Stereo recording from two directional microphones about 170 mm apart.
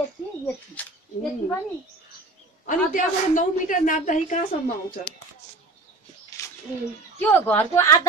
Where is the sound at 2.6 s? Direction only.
50° left (ahead or behind).